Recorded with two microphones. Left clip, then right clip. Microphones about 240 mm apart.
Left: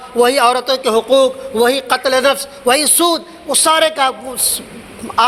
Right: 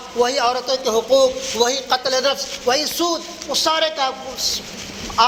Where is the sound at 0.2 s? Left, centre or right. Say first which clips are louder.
Left 7 dB; left.